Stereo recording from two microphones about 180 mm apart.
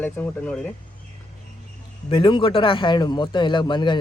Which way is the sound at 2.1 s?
30° left (ahead or behind).